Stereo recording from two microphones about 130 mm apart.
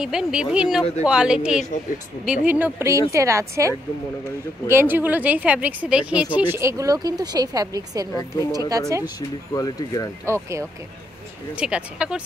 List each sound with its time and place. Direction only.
0.0 s speech: 5° right (ahead or behind); by 8.1 s 30° right (ahead or behind)
8.1 s speech: 25° left (ahead or behind)
8.5 s speech: 30° right (ahead or behind)
9.5 s speech: 30° left (ahead or behind)
10.2 s speech: 20° right (ahead or behind)
11.5 s speech: 10° right (ahead or behind)